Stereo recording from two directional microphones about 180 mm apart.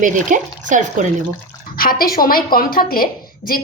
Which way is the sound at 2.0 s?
55° left (ahead or behind).